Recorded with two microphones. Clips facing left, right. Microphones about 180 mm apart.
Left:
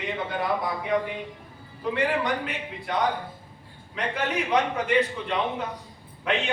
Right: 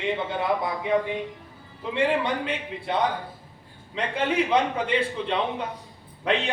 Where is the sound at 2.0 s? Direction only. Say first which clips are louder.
Right 3 dB; 25° right (ahead or behind).